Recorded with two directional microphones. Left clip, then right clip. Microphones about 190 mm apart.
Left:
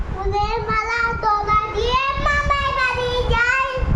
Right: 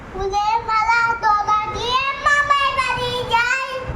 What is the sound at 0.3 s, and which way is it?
Child singing, centre (ahead or behind).